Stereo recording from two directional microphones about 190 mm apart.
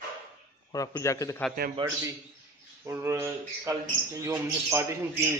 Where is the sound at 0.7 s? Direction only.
20° left (ahead or behind).